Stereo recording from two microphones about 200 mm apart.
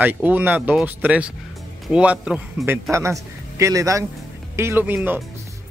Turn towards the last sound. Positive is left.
turn(degrees=-5)  # may be behind; listen again after turning